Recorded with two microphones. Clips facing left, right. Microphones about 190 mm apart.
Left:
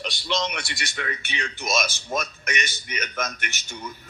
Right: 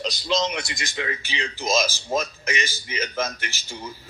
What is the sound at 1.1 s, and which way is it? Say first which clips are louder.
Speech: right 2 dB; 90° right.